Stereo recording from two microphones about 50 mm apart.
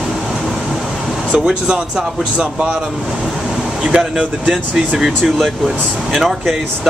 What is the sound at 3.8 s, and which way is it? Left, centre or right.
Speech, right.